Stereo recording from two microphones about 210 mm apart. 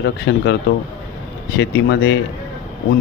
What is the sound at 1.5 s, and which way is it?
Speech, 55° left (ahead or behind).